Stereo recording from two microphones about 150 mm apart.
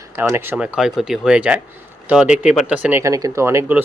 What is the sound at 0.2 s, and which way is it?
A man's voice, 15° right (ahead or behind).